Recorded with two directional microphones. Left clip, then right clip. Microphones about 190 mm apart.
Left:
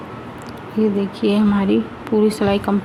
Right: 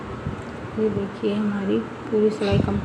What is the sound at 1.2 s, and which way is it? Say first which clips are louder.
Speech: left 8 dB; 50° left (ahead or behind).